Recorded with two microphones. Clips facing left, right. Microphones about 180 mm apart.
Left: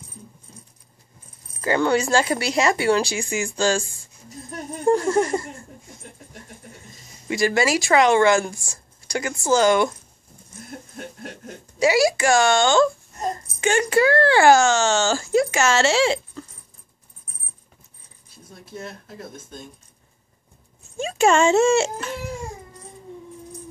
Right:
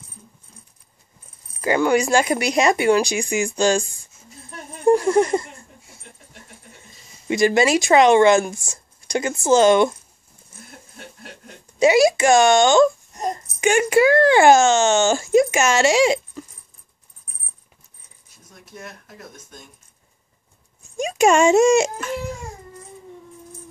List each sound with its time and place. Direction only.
1.6 s speech: 15° right (ahead or behind)
4.8 s a sound: 15° right (ahead or behind)
7.2 s speech: 20° right (ahead or behind)
10.7 s snicker: 45° left (ahead or behind)
11.8 s a child's voice: 20° right (ahead or behind)
18.3 s speech: 30° left (ahead or behind)
21.0 s speech: 15° right (ahead or behind)